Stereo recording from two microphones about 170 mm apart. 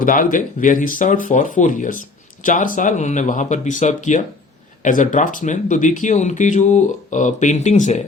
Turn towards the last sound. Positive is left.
turn(degrees=45)  # may be behind; listen again after turning